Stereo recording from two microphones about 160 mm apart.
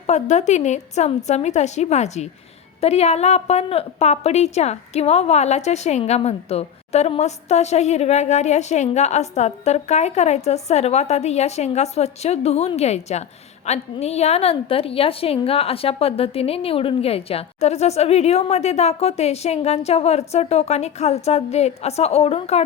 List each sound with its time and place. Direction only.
0.1 s a woman's voice: 45° left (ahead or behind)